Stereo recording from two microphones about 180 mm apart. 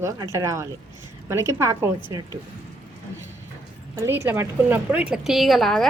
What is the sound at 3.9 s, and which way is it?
Speech, 15° right (ahead or behind).